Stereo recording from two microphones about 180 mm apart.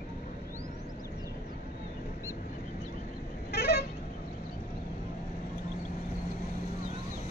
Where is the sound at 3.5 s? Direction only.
60° left (ahead or behind).